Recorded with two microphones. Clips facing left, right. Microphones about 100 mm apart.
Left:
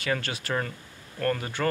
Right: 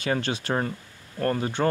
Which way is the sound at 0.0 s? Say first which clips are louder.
Right 3 dB; 25° right (ahead or behind).